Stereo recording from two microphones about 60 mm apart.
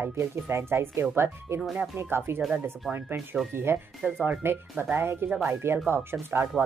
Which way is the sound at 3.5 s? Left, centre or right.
Right.